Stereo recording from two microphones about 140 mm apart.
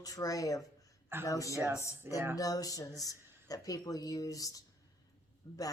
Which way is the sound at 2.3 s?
25° left (ahead or behind).